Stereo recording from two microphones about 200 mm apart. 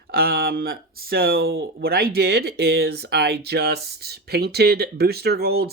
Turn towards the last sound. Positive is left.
turn(degrees=-50)  # may be behind; listen again after turning